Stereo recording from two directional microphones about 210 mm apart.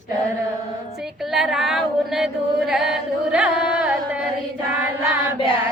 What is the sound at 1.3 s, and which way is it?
Singing, centre (ahead or behind).